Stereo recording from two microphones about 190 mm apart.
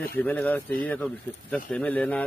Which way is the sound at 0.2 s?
10° left (ahead or behind).